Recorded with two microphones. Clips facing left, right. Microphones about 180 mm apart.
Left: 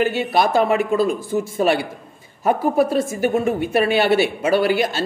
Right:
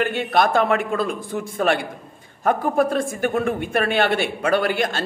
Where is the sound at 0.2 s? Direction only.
5° left (ahead or behind).